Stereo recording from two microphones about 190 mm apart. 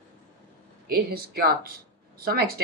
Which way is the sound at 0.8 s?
55° right (ahead or behind).